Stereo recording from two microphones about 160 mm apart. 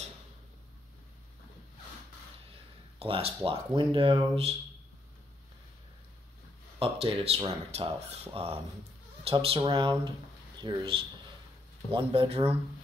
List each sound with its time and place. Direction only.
3.0 s speech: 35° right (ahead or behind)
6.8 s speech: 35° right (ahead or behind)